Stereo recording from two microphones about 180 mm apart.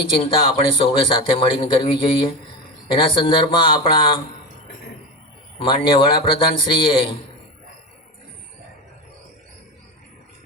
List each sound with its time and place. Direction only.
0.0 s a man's voice: 30° left (ahead or behind)
5.5 s a man's voice: 30° left (ahead or behind)